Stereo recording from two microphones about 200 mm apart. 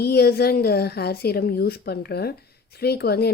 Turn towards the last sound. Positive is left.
turn(degrees=50)  # may be behind; listen again after turning